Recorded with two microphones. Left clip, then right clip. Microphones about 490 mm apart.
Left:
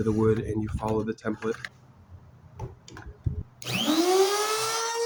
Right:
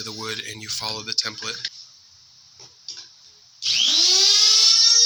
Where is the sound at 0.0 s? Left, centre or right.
Left.